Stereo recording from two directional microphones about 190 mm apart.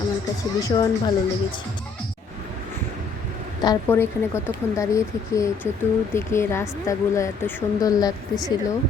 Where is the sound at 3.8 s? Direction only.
10° left (ahead or behind).